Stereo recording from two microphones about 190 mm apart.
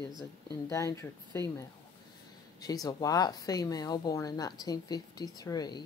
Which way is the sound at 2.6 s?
20° left (ahead or behind).